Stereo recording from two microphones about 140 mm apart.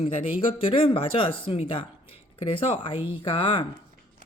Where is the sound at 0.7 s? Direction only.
40° left (ahead or behind).